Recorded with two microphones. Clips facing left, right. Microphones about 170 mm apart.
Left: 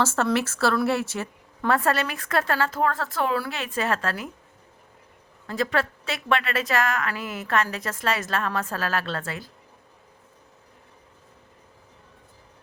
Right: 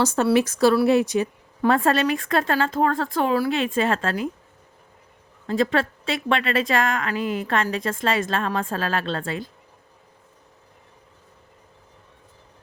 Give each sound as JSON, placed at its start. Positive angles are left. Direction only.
{"t": 0.0, "sound": "a woman's voice", "side_deg": -15}
{"t": 5.5, "sound": "a woman's voice", "side_deg": -25}